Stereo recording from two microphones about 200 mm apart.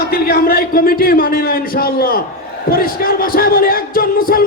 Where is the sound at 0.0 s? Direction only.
50° left (ahead or behind).